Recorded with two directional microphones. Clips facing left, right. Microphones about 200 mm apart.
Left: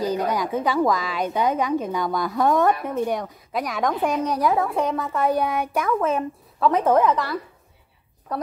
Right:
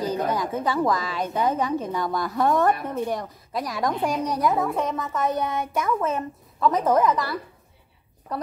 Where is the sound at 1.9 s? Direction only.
Centre (ahead or behind).